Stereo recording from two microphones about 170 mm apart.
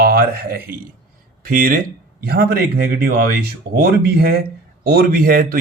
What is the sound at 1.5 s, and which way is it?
Speech, 55° right (ahead or behind).